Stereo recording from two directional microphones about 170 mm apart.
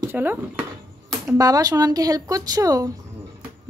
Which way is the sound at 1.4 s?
20° right (ahead or behind).